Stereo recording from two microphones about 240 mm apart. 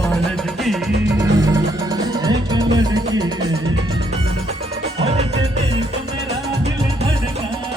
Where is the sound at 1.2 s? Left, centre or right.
Centre.